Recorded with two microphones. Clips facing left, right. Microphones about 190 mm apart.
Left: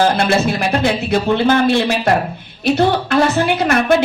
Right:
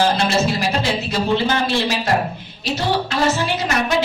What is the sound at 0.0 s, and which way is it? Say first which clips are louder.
A woman's voice: left 3 dB; 55° left (ahead or behind).